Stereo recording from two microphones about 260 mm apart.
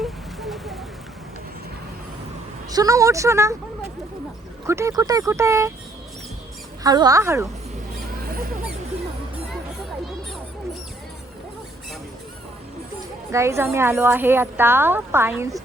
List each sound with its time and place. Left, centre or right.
0.0 s a sound: centre
2.6 s speech: centre
4.6 s speech: centre
6.8 s speech: centre
8.1 s a sound: right
13.0 s speech: centre